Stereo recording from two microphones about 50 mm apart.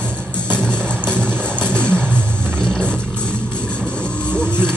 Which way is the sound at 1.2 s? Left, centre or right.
Right.